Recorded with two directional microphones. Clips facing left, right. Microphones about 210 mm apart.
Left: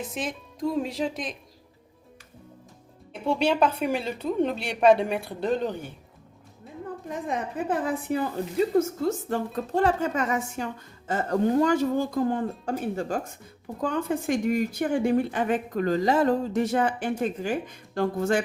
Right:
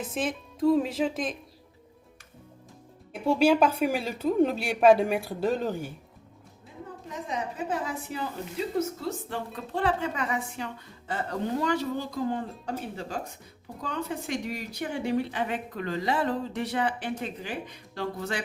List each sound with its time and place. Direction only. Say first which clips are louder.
0.1 s a woman's voice: right 2 dB; 5° right (ahead or behind)
3.1 s a woman's voice: right 2 dB; 5° right (ahead or behind)
7.1 s a woman's voice: left 3 dB; 55° left (ahead or behind)